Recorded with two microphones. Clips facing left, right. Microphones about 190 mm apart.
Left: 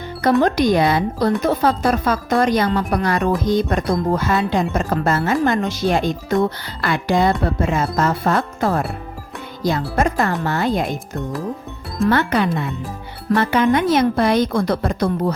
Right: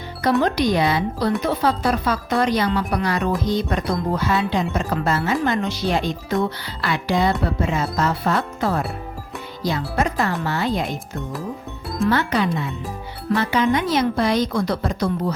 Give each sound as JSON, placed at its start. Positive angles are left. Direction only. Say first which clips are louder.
{"t": 0.4, "sound": "speech", "louder": "left 3 dB", "side_deg": 50}
{"t": 12.0, "sound": "speech", "louder": "left 3 dB", "side_deg": 55}